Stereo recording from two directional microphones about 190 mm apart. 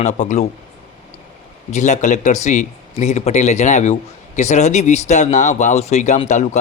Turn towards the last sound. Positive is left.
turn(degrees=40)  # may be behind; listen again after turning